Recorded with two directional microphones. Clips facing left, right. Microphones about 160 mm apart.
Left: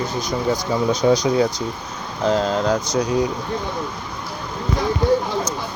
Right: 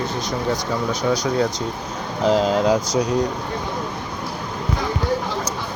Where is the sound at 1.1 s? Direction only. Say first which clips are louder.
Left 1 dB; 15° left (ahead or behind).